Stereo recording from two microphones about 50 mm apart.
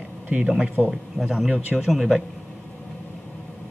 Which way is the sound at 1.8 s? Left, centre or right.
Centre.